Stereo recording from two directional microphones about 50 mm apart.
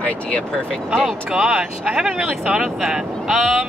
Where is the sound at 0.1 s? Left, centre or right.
Left.